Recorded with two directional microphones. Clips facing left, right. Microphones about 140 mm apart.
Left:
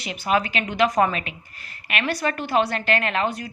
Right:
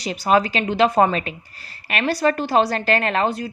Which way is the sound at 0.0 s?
35° right (ahead or behind).